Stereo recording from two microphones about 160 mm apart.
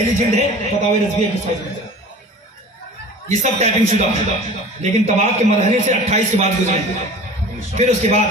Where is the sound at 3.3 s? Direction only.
40° right (ahead or behind).